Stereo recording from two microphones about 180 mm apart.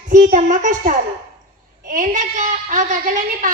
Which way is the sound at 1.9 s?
45° right (ahead or behind).